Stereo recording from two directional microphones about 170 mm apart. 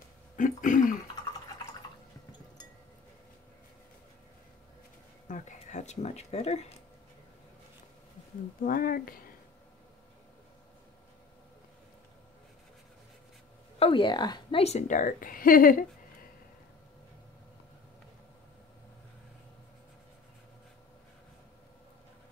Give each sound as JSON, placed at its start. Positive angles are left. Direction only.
{"t": 0.4, "sound": "a woman's voice", "side_deg": 50}
{"t": 5.3, "sound": "a sound", "side_deg": 45}
{"t": 8.6, "sound": "speech", "side_deg": 55}
{"t": 13.7, "sound": "a woman's voice", "side_deg": 30}
{"t": 14.6, "sound": "a woman's voice", "side_deg": 40}